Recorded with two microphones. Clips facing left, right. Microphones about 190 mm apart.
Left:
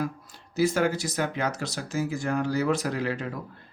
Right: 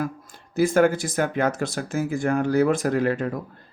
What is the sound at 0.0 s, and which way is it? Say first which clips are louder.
Speech: right 2 dB; 50° right (ahead or behind).